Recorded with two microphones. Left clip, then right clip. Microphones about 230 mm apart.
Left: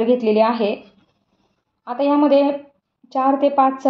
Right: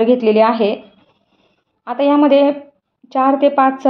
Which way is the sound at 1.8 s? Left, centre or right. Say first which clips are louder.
Right 4 dB; right.